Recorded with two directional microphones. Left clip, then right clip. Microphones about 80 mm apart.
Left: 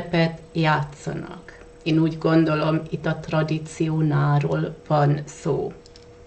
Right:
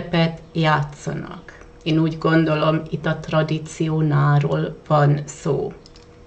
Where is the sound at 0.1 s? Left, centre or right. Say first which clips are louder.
Right 1 dB; centre.